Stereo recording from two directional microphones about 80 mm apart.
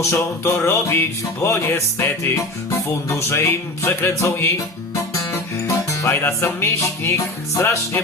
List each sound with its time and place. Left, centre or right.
0.0 s music: left